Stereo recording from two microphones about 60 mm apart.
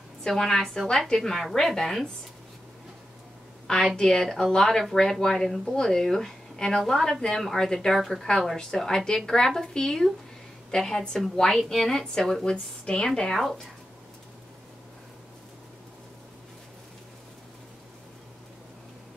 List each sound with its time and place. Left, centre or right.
0.2 s a woman's voice: centre
3.6 s a woman's voice: centre